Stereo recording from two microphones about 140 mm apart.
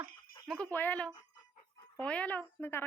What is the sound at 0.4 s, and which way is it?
Speech, 5° left (ahead or behind).